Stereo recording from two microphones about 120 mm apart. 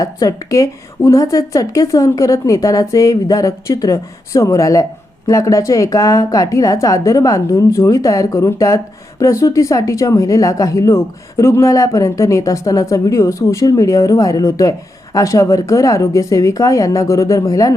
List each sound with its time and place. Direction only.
0.0 s speech: 25° left (ahead or behind)